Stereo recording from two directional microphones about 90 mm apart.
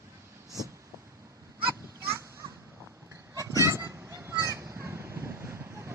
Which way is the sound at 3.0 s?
40° right (ahead or behind).